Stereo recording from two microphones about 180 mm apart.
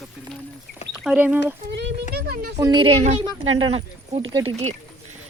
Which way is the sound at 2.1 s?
60° right (ahead or behind).